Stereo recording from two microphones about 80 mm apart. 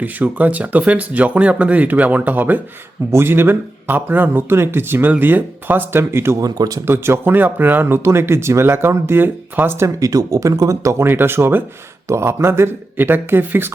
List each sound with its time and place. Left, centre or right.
0.0 s speech: right
6.4 s speech: right
6.8 s speech: right
10.0 s speech: right